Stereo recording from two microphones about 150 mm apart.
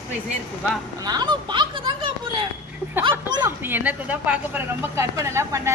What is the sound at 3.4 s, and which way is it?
A woman's voice, 15° right (ahead or behind).